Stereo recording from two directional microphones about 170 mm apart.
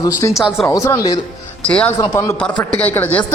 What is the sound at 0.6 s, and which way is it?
Speech, 15° left (ahead or behind).